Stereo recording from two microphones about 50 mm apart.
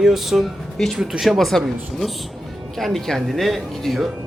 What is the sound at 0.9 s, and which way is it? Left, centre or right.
Speech, centre.